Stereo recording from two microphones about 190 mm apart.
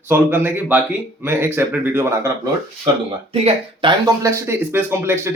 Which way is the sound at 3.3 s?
30° right (ahead or behind).